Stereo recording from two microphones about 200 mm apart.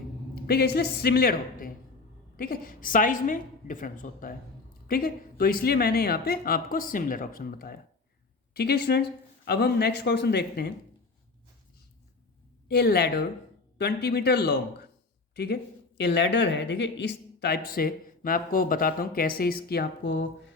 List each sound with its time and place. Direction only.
0.4 s speech: 50° left (ahead or behind)
12.6 s a man's voice: 55° left (ahead or behind)
16.0 s speech: 60° left (ahead or behind)